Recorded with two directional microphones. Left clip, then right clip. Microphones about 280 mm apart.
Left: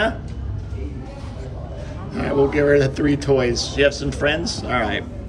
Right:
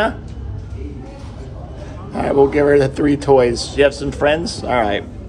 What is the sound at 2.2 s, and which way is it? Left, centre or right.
Speech, centre.